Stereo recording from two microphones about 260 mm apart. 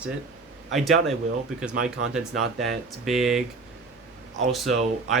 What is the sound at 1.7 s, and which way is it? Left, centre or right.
Speech, right.